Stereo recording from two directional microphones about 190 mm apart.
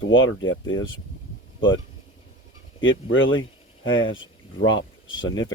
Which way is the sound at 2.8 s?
90° left.